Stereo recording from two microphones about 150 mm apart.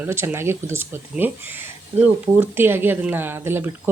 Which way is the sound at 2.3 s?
15° right (ahead or behind).